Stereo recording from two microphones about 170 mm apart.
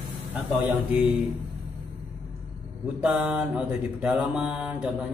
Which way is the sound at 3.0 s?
5° right (ahead or behind).